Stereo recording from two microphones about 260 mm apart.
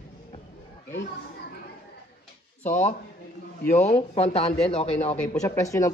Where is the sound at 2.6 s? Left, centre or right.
Left.